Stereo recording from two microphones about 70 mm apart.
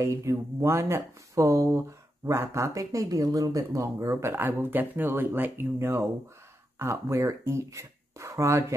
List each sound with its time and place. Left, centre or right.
0.0 s speech: right
2.7 s speech: right
6.9 s speech: right